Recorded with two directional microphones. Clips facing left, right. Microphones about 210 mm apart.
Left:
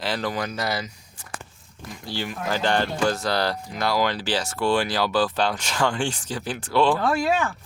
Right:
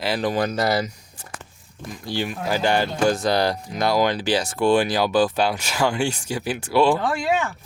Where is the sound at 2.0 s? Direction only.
15° right (ahead or behind).